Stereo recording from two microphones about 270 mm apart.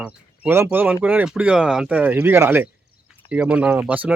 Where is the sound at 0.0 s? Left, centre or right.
Centre.